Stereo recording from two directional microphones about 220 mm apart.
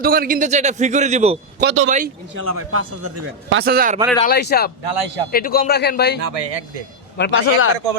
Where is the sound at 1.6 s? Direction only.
60° right (ahead or behind); by 3.6 s 80° right.